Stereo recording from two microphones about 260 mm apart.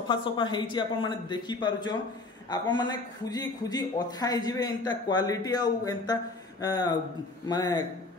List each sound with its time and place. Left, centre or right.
0.1 s a man's voice: centre